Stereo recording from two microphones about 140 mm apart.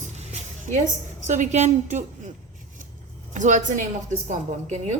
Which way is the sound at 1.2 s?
60° right (ahead or behind).